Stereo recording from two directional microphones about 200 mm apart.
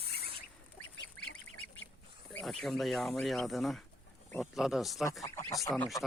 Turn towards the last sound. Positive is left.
turn(degrees=5)  # may be behind; listen again after turning